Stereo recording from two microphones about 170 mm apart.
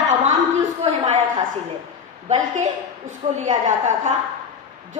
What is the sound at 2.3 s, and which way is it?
A woman's voice, 45° right (ahead or behind).